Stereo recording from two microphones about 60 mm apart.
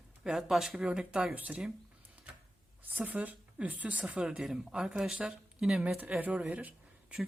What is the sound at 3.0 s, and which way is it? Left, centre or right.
Speech, right.